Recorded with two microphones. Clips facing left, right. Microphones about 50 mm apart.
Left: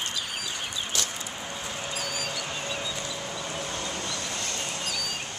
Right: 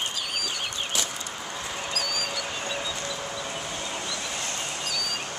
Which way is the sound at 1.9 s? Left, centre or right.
Centre.